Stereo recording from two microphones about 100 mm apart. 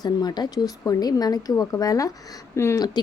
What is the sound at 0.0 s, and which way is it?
Speech, 40° left (ahead or behind).